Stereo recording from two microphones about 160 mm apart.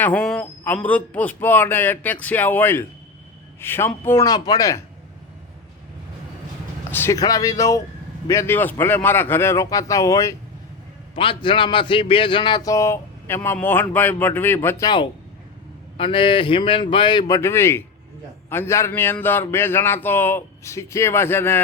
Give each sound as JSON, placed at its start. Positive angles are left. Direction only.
{"t": 0.0, "sound": "a man's voice", "side_deg": 5}
{"t": 6.9, "sound": "a man's voice", "side_deg": 15}
{"t": 11.1, "sound": "a man's voice", "side_deg": 35}
{"t": 16.0, "sound": "a man's voice", "side_deg": 35}